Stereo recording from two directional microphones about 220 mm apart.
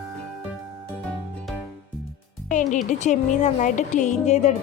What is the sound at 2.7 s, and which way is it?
Speech, 35° left (ahead or behind).